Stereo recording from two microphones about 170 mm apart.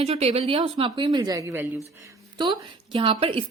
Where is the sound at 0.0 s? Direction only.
35° right (ahead or behind).